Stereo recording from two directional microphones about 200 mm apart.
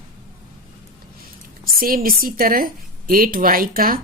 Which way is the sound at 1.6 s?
45° right (ahead or behind).